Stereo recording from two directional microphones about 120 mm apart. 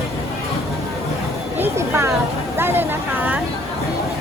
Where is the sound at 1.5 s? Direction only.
20° right (ahead or behind).